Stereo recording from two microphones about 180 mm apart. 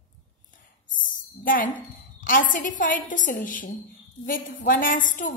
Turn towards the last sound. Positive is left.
turn(degrees=45)  # may be behind; listen again after turning